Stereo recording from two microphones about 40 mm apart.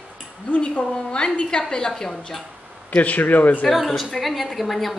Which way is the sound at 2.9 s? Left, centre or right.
Left.